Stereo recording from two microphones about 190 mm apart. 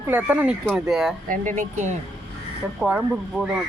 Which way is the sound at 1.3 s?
40° right (ahead or behind).